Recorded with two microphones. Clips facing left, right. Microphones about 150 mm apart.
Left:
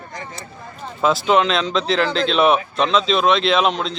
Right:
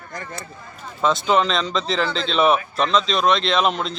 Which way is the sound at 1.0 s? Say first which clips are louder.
Left 2 dB; 5° left (ahead or behind).